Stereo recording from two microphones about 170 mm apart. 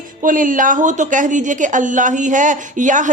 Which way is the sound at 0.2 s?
50° right (ahead or behind).